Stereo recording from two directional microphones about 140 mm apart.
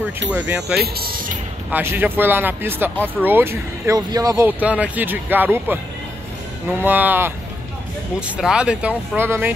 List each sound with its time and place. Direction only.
0.3 s speech: 10° right (ahead or behind)
0.9 s speech: 90° right
1.7 s speech: 15° right (ahead or behind)
4.5 s speech: 10° right (ahead or behind)
6.8 s speech: 15° right (ahead or behind)